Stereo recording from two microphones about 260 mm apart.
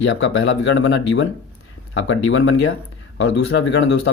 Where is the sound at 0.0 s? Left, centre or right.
Left.